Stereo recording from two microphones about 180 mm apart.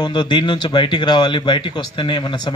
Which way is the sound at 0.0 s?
25° left (ahead or behind).